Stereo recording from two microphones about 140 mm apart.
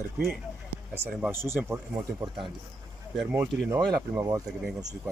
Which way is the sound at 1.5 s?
15° right (ahead or behind).